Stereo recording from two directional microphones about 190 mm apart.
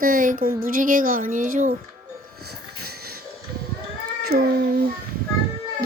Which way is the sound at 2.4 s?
55° right (ahead or behind).